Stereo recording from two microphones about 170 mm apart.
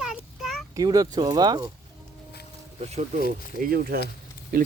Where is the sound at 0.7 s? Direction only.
20° right (ahead or behind).